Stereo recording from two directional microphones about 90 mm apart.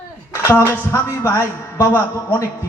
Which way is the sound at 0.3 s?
30° left (ahead or behind).